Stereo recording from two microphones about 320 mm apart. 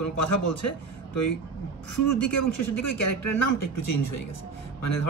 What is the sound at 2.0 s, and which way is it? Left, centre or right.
Speech, left.